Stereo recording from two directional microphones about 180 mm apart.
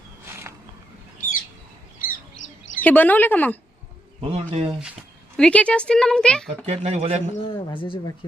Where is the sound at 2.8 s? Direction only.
10° left (ahead or behind).